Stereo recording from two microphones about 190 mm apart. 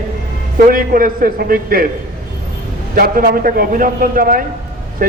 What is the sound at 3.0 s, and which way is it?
Speech, 50° right (ahead or behind).